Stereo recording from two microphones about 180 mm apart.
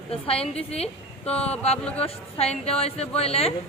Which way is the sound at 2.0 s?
35° left (ahead or behind).